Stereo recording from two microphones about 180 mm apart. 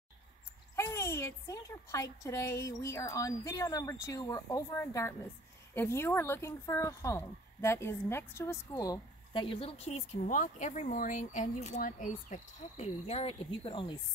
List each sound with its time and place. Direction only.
0.7 s a woman's voice: 15° left (ahead or behind)